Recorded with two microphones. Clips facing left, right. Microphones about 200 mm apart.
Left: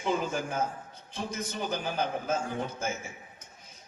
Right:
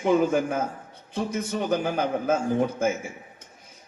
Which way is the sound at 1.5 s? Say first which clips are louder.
Right 9 dB; 70° right (ahead or behind).